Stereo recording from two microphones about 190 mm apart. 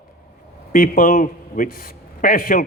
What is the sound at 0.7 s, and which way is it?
A man's voice, 45° left (ahead or behind).